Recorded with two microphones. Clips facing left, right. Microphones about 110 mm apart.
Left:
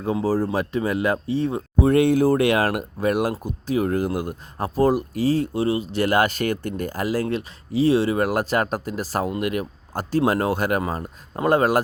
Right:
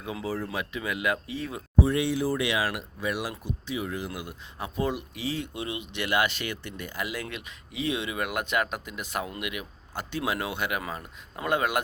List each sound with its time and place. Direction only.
0.0 s speech: 35° left (ahead or behind)
1.8 s speech: 55° left (ahead or behind); by 11.8 s 35° left (ahead or behind)